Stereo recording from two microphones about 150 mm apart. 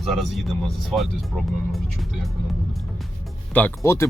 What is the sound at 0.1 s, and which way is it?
Speech, centre (ahead or behind).